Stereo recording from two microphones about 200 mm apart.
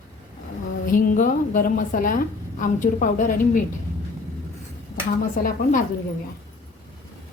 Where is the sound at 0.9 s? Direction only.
45° left (ahead or behind).